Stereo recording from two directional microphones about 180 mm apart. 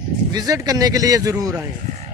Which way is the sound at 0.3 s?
20° right (ahead or behind).